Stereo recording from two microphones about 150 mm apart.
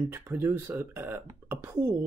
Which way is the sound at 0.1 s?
15° right (ahead or behind).